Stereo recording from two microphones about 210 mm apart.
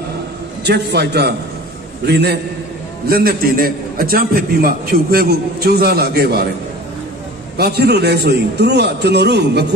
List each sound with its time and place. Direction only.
0.7 s a man's voice: 50° right (ahead or behind)
7.5 s a man's voice: 50° right (ahead or behind)